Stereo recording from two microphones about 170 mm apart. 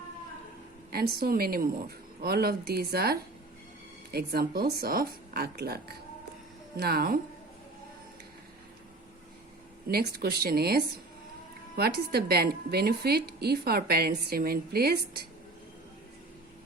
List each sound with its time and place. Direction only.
0.9 s a woman's voice: 65° right (ahead or behind)
9.9 s a woman's voice: 70° right (ahead or behind)